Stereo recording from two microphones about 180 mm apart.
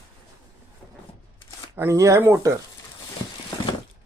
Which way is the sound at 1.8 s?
15° right (ahead or behind).